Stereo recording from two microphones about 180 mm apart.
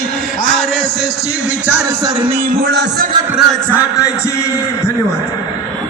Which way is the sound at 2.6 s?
70° right (ahead or behind).